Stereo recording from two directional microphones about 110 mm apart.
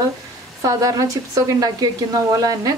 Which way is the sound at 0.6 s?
30° right (ahead or behind).